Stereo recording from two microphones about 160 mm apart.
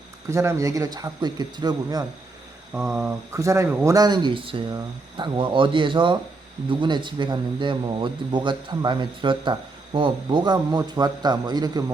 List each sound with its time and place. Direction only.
0.3 s speech: 15° right (ahead or behind)
2.7 s speech: 15° right (ahead or behind)
3.9 s speech: 25° right (ahead or behind)